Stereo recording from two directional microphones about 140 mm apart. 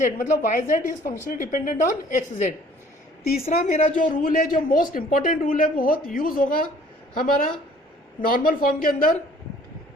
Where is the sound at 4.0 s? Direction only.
75° left (ahead or behind); by 6.5 s 90° left.